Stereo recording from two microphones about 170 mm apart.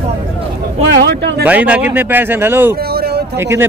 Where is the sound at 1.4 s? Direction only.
10° right (ahead or behind).